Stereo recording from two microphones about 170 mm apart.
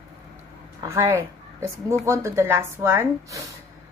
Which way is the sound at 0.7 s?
15° right (ahead or behind).